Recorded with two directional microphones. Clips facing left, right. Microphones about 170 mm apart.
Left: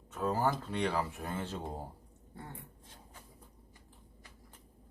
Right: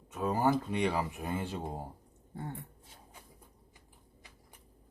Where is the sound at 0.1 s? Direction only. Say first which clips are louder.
Right 3 dB; 10° right (ahead or behind).